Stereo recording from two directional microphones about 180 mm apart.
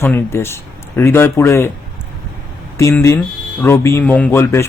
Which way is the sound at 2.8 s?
15° left (ahead or behind).